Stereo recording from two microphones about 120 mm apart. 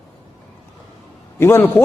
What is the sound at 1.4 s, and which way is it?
Speech, 20° left (ahead or behind).